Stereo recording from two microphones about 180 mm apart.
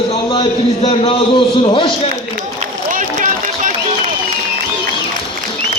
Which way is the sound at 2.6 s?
45° right (ahead or behind).